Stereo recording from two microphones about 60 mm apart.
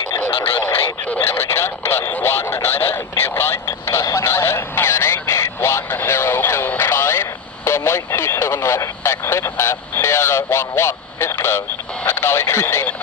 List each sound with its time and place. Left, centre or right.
1.0 s radio: left
1.3 s radio: left
4.2 s a sound: left
6.8 s radio: left